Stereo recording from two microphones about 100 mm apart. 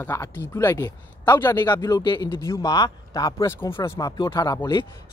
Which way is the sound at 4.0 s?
40° left (ahead or behind).